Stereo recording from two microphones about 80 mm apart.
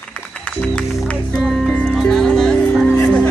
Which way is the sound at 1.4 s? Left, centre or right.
Centre.